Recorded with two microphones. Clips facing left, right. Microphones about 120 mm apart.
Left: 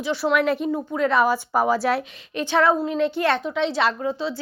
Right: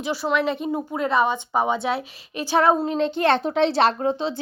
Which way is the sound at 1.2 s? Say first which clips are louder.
Left 1 dB; 25° right (ahead or behind).